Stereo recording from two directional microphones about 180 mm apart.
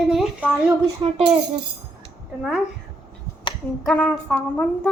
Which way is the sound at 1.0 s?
30° right (ahead or behind).